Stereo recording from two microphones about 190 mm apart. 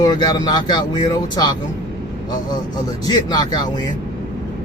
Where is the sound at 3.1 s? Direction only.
20° left (ahead or behind).